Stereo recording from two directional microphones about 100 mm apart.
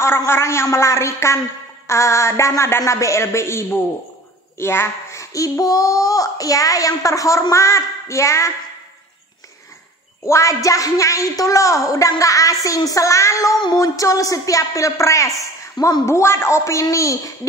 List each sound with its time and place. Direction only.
0.0 s a woman's voice: 25° left (ahead or behind)
10.2 s a child's voice: 30° left (ahead or behind)